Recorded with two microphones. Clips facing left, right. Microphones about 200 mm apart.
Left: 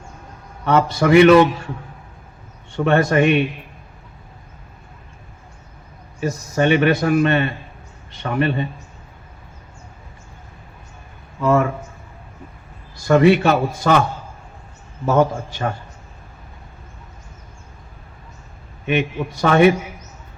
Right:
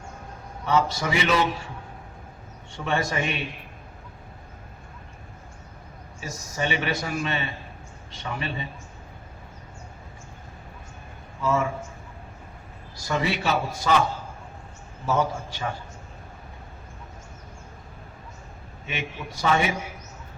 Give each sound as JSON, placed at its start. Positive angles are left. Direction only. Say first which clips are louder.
{"t": 0.6, "sound": "a man's voice", "louder": "left 7 dB", "side_deg": 60}
{"t": 2.7, "sound": "a man's voice", "louder": "left 11 dB", "side_deg": 60}
{"t": 6.1, "sound": "a man's voice", "louder": "left 11 dB", "side_deg": 60}
{"t": 11.3, "sound": "a sound", "louder": "left 8 dB", "side_deg": 60}
{"t": 13.0, "sound": "a man's voice", "louder": "left 14 dB", "side_deg": 55}
{"t": 15.0, "sound": "a man's voice", "louder": "left 8 dB", "side_deg": 55}
{"t": 18.9, "sound": "a man's voice", "louder": "left 13 dB", "side_deg": 60}